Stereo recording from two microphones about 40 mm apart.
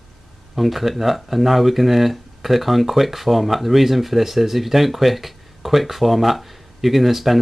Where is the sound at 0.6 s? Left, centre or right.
Centre.